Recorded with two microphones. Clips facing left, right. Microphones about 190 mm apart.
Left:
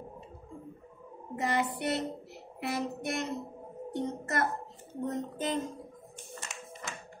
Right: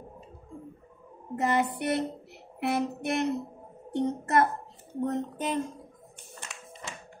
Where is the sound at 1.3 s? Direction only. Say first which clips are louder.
Right 4 dB; 55° right (ahead or behind).